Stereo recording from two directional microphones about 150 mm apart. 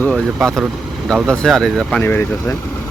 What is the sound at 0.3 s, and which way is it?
Speech, centre (ahead or behind).